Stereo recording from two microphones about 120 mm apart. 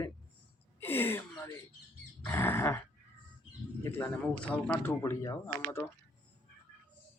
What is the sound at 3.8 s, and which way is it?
Speech, 15° left (ahead or behind).